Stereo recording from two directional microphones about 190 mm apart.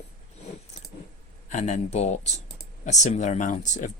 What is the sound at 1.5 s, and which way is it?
Speech, 40° left (ahead or behind).